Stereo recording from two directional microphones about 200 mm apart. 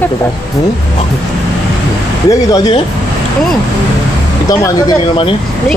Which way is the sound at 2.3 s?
15° left (ahead or behind).